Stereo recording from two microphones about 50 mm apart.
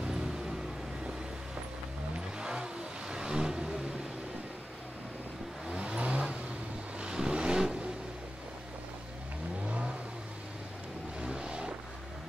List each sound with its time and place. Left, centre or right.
0.0 s vehicle: centre
2.1 s vehicle: centre
5.7 s vehicle: right
9.7 s vehicle: right
11.1 s a sound: right